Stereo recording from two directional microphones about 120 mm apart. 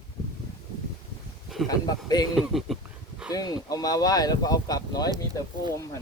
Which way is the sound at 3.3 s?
30° left (ahead or behind).